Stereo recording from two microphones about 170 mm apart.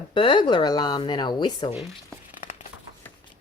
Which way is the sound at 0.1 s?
30° left (ahead or behind).